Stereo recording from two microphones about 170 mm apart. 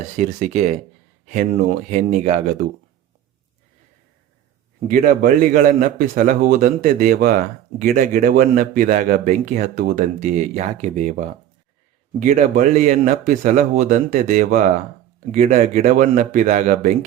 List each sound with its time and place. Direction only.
0.2 s speech: 45° right (ahead or behind)
1.9 s speech: 45° right (ahead or behind)
4.9 s a man's voice: 50° right (ahead or behind)